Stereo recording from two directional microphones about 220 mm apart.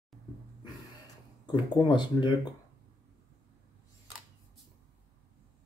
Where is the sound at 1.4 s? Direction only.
20° left (ahead or behind).